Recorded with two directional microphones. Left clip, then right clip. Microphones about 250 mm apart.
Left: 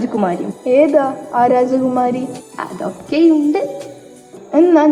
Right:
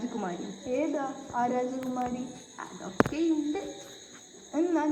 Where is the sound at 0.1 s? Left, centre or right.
Left.